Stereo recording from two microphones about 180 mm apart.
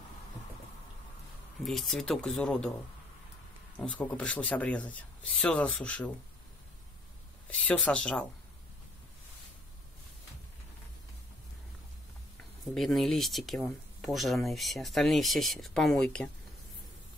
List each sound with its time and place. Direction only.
1.6 s speech: centre (ahead or behind)
3.7 s speech: 5° left (ahead or behind)
7.4 s speech: 5° left (ahead or behind)
12.7 s speech: centre (ahead or behind)